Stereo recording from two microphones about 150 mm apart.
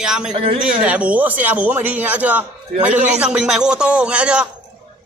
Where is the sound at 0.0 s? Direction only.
5° right (ahead or behind).